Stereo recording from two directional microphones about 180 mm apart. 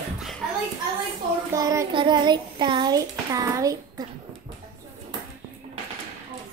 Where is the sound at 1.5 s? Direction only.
20° right (ahead or behind).